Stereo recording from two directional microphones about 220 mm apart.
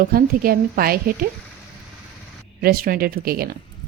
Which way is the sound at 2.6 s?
45° right (ahead or behind).